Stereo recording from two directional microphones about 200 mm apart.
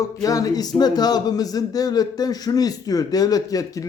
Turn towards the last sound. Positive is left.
turn(degrees=20)  # may be behind; listen again after turning